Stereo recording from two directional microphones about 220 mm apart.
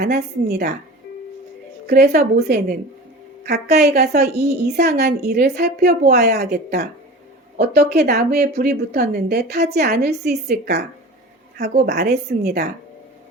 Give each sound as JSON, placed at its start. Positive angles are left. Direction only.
{"t": 0.0, "sound": "speech", "side_deg": -45}
{"t": 1.9, "sound": "speech", "side_deg": -45}
{"t": 11.6, "sound": "a woman's voice", "side_deg": -30}
{"t": 11.9, "sound": "speech", "side_deg": -45}